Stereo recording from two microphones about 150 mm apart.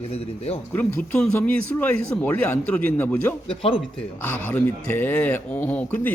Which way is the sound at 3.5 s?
35° left (ahead or behind).